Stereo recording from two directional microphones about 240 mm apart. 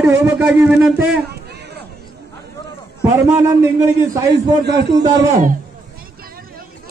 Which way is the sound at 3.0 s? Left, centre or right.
Centre.